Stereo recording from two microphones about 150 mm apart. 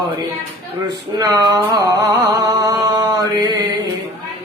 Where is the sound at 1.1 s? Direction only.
25° right (ahead or behind).